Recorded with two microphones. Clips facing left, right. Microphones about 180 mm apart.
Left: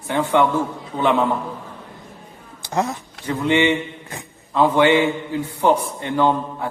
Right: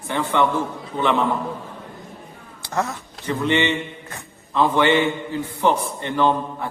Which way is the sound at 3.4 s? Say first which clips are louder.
Left 3 dB; 10° left (ahead or behind).